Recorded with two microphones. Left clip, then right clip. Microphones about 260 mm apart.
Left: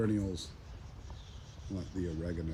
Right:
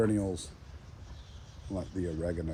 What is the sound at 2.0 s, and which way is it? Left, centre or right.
Speech, right.